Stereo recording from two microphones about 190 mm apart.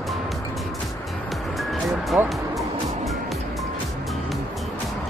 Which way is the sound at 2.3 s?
Centre (ahead or behind).